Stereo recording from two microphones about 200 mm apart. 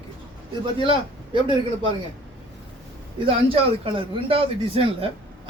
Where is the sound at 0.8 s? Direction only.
25° right (ahead or behind).